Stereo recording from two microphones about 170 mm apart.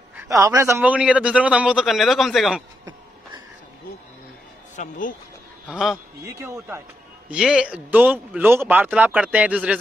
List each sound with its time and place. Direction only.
0.3 s speech: 20° right (ahead or behind); by 2.6 s centre (ahead or behind)
4.7 s speech: 50° left (ahead or behind)
5.7 s a man's voice: centre (ahead or behind)
6.2 s speech: 15° right (ahead or behind)
7.2 s speech: 5° right (ahead or behind)